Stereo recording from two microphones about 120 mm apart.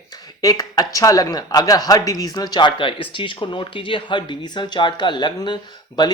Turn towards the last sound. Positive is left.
turn(degrees=40)  # may be behind; listen again after turning